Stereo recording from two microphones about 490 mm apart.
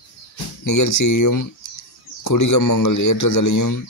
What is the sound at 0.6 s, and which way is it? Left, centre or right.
A man's voice, left.